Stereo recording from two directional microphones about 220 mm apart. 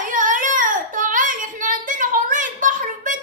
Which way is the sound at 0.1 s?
35° right (ahead or behind).